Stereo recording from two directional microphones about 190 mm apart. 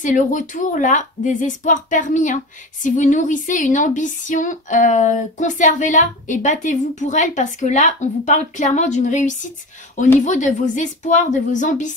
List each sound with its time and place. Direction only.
0.0 s a woman's voice: 40° left (ahead or behind)